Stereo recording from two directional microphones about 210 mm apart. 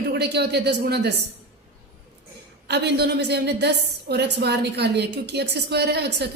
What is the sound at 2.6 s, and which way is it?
A woman's voice, 50° right (ahead or behind).